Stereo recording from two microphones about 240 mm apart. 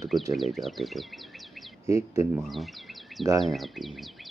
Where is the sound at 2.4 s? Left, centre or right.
Centre.